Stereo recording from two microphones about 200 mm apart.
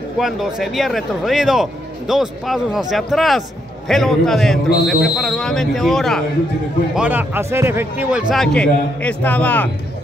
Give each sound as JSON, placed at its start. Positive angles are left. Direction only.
{"t": 0.2, "sound": "speech", "side_deg": 0}
{"t": 7.0, "sound": "speech", "side_deg": -10}